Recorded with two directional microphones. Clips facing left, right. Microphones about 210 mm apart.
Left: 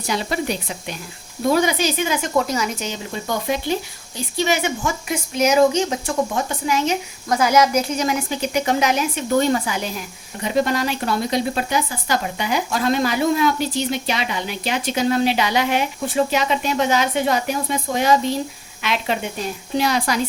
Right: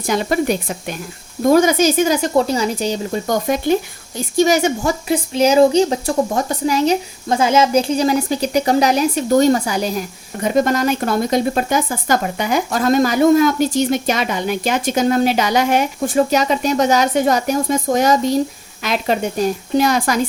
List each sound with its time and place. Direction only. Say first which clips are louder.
0.0 s speech: right 6 dB; 50° right (ahead or behind)